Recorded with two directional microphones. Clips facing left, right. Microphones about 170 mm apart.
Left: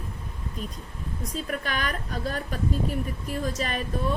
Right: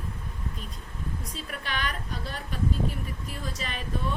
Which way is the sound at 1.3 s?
45° left (ahead or behind).